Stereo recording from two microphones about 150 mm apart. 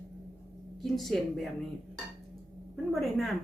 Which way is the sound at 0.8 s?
Centre (ahead or behind).